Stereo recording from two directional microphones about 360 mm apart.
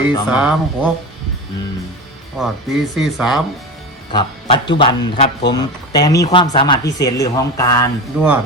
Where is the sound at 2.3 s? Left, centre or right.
Centre.